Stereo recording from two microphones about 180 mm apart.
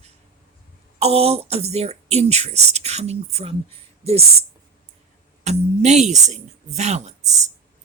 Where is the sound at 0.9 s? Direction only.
35° right (ahead or behind).